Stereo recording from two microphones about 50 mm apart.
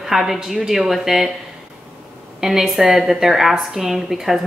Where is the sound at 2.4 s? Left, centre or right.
Centre.